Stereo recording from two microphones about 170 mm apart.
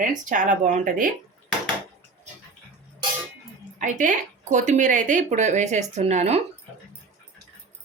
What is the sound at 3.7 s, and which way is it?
A woman's voice, 45° right (ahead or behind).